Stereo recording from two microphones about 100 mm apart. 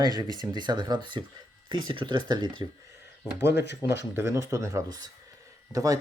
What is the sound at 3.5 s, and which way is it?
Speech, 25° right (ahead or behind).